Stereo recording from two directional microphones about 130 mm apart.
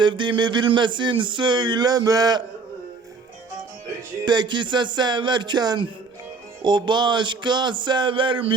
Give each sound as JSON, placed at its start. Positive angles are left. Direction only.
{"t": 0.0, "sound": "speech", "side_deg": -40}
{"t": 4.3, "sound": "speech", "side_deg": -35}